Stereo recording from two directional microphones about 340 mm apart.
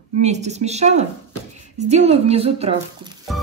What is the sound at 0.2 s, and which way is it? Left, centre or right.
A woman's voice, centre.